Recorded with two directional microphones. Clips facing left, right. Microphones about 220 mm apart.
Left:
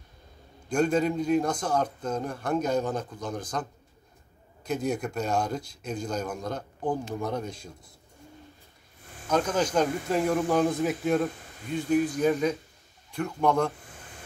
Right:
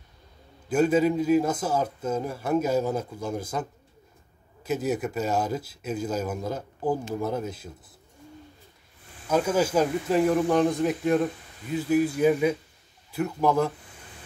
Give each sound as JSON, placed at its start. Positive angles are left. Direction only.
{"t": 0.7, "sound": "speech", "side_deg": -5}
{"t": 4.6, "sound": "speech", "side_deg": -5}
{"t": 9.3, "sound": "speech", "side_deg": -5}